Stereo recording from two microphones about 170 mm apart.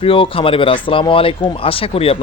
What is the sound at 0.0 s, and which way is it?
Speech, 30° left (ahead or behind).